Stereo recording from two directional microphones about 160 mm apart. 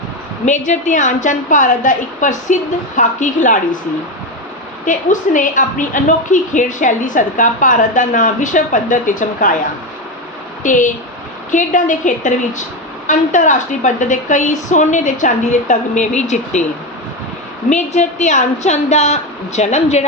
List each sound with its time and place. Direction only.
0.4 s a woman's voice: 50° left (ahead or behind)
4.9 s a woman's voice: 55° left (ahead or behind)
10.6 s a woman's voice: 55° left (ahead or behind)
17.7 s a woman's voice: 45° left (ahead or behind)